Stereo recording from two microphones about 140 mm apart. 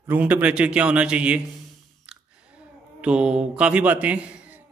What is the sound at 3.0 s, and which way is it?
Speech, 5° right (ahead or behind).